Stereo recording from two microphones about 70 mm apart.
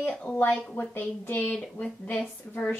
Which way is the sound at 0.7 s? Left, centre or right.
Left.